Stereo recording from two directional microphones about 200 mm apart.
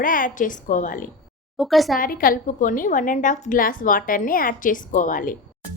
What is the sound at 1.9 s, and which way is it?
A woman's voice, 45° left (ahead or behind).